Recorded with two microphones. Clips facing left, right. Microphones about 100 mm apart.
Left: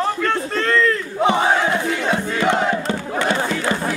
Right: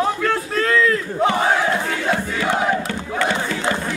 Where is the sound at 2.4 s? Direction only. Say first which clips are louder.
Left 4 dB; 15° left (ahead or behind).